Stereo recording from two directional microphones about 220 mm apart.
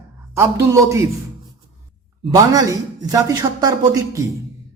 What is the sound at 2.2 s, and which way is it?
Speech, 15° right (ahead or behind).